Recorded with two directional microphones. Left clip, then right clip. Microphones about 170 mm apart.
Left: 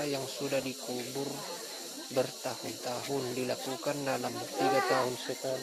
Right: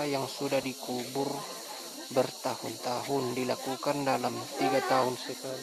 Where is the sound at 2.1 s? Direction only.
15° right (ahead or behind).